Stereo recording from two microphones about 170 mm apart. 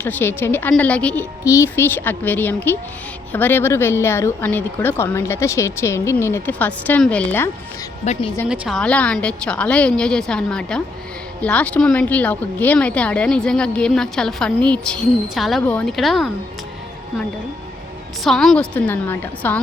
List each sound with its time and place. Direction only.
0.0 s speech: 10° left (ahead or behind)
8.0 s a woman's voice: 40° left (ahead or behind)
8.4 s speech: 5° right (ahead or behind)
18.2 s speech: centre (ahead or behind)